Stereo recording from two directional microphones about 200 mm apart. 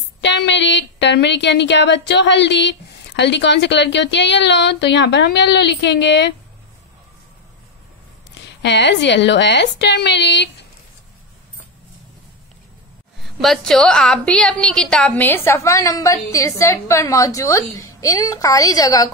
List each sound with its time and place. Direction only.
0.2 s a woman's voice: 65° left (ahead or behind)
8.6 s a woman's voice: 60° left (ahead or behind)
13.2 s a woman's voice: centre (ahead or behind); by 19.0 s 20° left (ahead or behind)